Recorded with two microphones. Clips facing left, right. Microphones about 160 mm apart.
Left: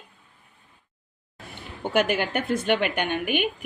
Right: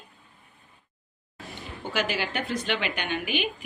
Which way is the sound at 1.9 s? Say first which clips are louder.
Left 6 dB; 55° left (ahead or behind).